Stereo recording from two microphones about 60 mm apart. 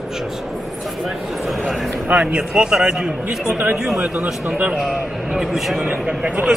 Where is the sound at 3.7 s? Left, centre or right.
Centre.